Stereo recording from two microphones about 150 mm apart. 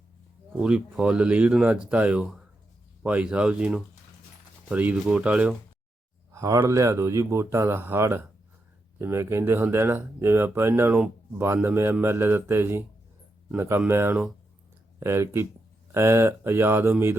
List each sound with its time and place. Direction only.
0.6 s speech: 5° right (ahead or behind)
6.3 s speech: 20° right (ahead or behind)